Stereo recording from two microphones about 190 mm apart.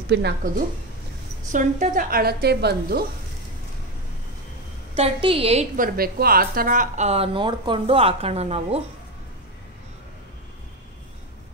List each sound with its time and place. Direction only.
0.1 s a woman's voice: 60° right (ahead or behind)
1.5 s a woman's voice: 40° right (ahead or behind)
4.9 s speech: 30° right (ahead or behind)
5.8 s speech: 50° right (ahead or behind); by 8.8 s 35° right (ahead or behind)